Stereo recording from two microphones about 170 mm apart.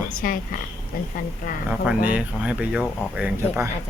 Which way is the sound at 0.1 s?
55° left (ahead or behind).